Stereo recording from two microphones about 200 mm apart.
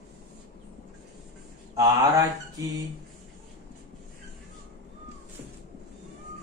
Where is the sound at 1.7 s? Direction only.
20° right (ahead or behind).